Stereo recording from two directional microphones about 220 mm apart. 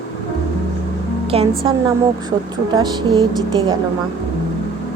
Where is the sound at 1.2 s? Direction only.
25° right (ahead or behind).